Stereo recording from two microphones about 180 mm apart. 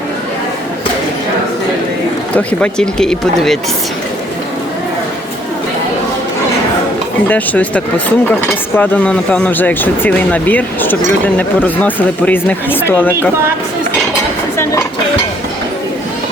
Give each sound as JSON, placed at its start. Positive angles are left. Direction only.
{"t": 2.3, "sound": "speech", "side_deg": 5}
{"t": 7.3, "sound": "speech", "side_deg": 10}
{"t": 14.6, "sound": "dishes", "side_deg": 15}